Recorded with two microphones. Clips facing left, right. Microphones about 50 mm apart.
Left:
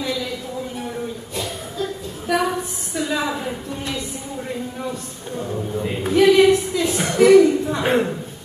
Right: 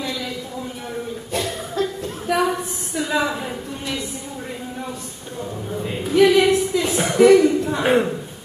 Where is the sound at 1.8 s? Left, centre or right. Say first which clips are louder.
Right 3 dB; right.